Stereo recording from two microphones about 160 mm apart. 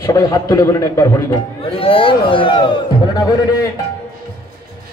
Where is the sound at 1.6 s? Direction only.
35° left (ahead or behind).